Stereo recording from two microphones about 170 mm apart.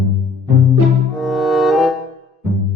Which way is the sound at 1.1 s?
Centre (ahead or behind).